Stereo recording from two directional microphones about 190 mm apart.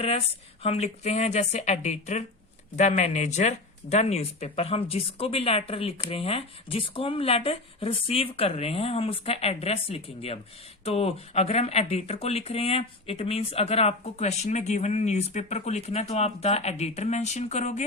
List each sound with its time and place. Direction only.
0.6 s speech: 35° left (ahead or behind)